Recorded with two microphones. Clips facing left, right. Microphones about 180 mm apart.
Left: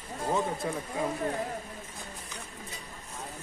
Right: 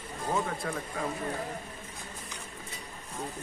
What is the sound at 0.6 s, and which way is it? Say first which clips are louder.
Speech: left 2 dB; 20° left (ahead or behind).